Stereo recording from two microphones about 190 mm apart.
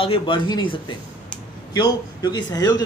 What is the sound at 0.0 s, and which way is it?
Speech, 25° left (ahead or behind).